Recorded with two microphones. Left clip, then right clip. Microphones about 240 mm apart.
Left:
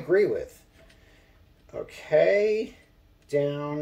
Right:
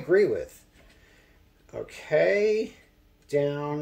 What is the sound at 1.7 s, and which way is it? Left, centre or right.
Speech, right.